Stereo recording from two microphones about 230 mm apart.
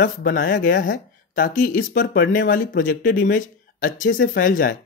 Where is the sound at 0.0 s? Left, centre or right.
Left.